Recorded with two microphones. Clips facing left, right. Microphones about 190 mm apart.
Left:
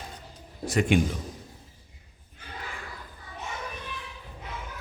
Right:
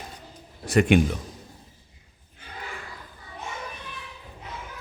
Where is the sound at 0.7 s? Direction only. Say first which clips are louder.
Right 5 dB; 65° right (ahead or behind).